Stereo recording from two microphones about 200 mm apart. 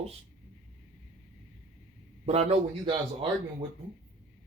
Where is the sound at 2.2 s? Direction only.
30° right (ahead or behind).